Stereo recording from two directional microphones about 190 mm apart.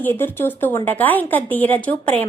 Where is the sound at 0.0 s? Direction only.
10° left (ahead or behind).